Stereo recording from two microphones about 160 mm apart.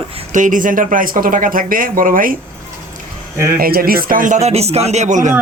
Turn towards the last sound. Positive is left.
turn(degrees=-50)  # may be behind; listen again after turning